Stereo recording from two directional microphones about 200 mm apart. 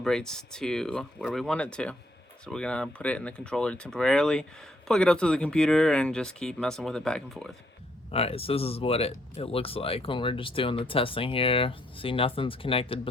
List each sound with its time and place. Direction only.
0.0 s speech: 5° left (ahead or behind)
8.1 s speech: 30° left (ahead or behind)